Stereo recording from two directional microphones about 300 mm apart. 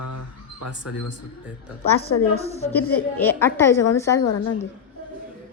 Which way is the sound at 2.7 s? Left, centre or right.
Centre.